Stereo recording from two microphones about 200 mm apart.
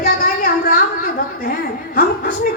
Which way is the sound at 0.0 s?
45° left (ahead or behind).